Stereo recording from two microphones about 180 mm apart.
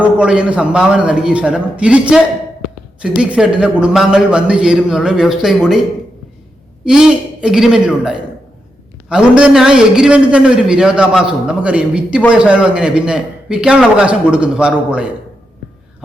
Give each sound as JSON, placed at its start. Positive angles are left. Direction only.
{"t": 0.0, "sound": "a man's voice", "side_deg": -5}
{"t": 6.8, "sound": "a man's voice", "side_deg": -5}